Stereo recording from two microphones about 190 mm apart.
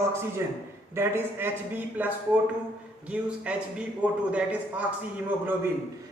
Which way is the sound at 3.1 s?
5° right (ahead or behind).